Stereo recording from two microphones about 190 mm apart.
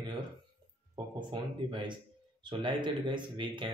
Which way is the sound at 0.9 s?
25° right (ahead or behind).